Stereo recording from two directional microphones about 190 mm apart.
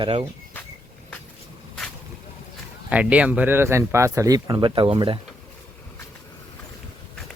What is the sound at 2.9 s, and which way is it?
Speech, 5° right (ahead or behind).